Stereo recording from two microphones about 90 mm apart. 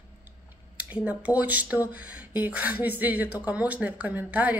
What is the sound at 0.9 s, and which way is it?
A woman's voice, 15° right (ahead or behind).